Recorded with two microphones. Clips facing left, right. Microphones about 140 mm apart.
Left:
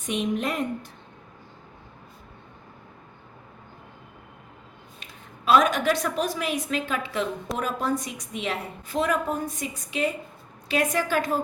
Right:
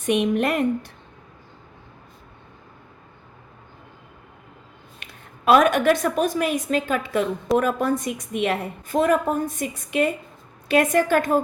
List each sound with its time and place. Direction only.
0.0 s a woman's voice: 65° right (ahead or behind)
5.0 s a sound: 70° right (ahead or behind)
5.5 s a woman's voice: 60° right (ahead or behind)